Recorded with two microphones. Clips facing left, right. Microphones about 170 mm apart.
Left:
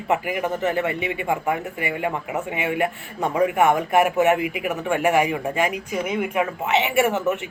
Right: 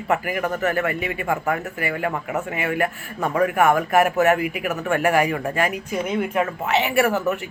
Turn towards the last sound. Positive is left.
turn(degrees=20)  # may be behind; listen again after turning